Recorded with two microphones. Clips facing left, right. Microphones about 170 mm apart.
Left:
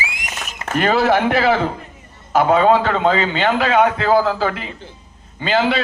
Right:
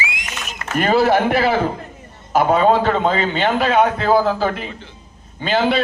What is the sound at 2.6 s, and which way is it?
A man's voice, 45° right (ahead or behind).